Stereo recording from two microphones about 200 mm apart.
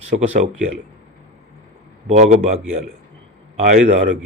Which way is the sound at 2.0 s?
35° right (ahead or behind).